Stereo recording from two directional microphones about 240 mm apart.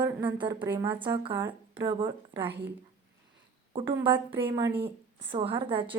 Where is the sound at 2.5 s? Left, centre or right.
Right.